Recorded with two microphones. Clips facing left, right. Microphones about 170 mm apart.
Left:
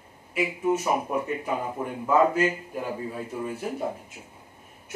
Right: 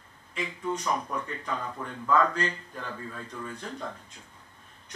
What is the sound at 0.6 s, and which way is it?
Speech, 10° left (ahead or behind).